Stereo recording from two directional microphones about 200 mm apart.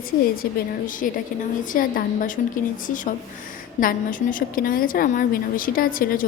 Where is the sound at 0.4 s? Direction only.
50° left (ahead or behind).